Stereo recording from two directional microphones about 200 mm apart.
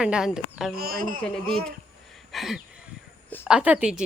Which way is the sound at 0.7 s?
50° right (ahead or behind).